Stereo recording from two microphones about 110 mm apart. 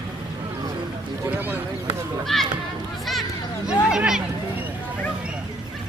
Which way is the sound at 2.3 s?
5° left (ahead or behind).